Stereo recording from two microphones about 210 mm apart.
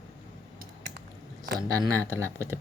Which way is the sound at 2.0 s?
15° right (ahead or behind).